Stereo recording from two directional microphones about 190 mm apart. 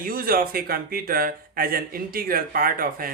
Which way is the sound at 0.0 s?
50° right (ahead or behind).